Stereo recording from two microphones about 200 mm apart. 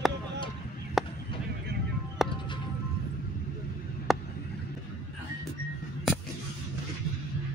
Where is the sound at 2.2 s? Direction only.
Centre (ahead or behind).